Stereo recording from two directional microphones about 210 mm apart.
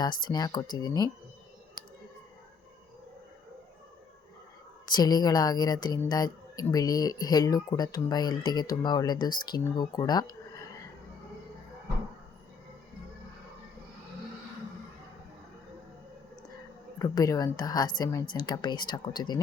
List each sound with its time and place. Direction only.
0.0 s speech: 20° left (ahead or behind)
4.9 s speech: 20° left (ahead or behind)
17.0 s speech: 15° left (ahead or behind)